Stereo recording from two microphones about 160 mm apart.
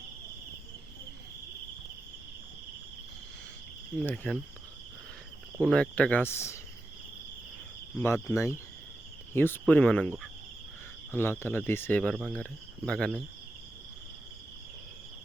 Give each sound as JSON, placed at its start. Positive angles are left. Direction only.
{"t": 3.9, "sound": "speech", "side_deg": 5}
{"t": 5.5, "sound": "speech", "side_deg": 5}
{"t": 7.9, "sound": "speech", "side_deg": 15}
{"t": 11.1, "sound": "speech", "side_deg": 15}